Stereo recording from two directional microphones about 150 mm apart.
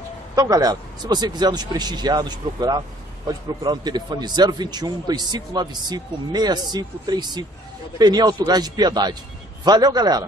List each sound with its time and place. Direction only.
0.4 s a man's voice: 25° right (ahead or behind)